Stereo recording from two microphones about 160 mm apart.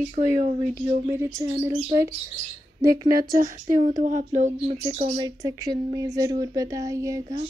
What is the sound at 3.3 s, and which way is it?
Speech, 50° right (ahead or behind).